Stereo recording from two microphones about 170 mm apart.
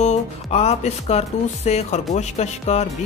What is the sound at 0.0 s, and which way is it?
A woman's voice, 40° left (ahead or behind).